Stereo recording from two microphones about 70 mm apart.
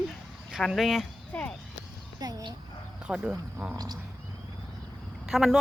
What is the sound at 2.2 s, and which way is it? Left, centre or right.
Speech, right.